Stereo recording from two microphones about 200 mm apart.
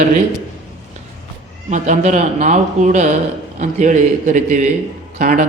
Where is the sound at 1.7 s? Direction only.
35° right (ahead or behind).